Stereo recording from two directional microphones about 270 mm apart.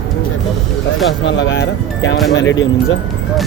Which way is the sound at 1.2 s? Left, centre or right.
Left.